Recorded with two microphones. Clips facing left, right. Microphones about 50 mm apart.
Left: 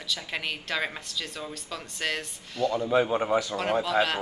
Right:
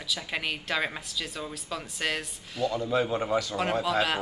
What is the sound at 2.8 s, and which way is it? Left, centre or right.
Speech, centre.